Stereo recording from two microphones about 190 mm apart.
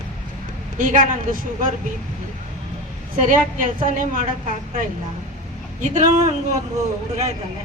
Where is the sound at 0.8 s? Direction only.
45° right (ahead or behind).